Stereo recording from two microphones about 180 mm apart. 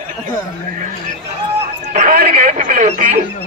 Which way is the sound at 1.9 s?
50° right (ahead or behind).